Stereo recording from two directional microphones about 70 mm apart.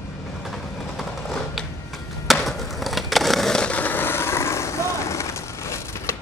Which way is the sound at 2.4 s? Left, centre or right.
Centre.